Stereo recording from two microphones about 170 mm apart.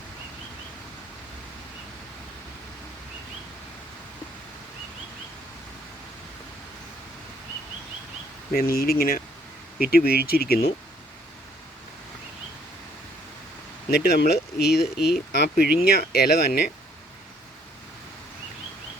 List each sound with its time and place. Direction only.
8.5 s speech: 60° left (ahead or behind)
13.9 s speech: 70° left (ahead or behind)